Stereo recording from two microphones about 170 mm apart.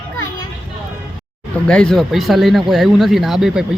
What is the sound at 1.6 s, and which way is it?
Speech, 5° left (ahead or behind).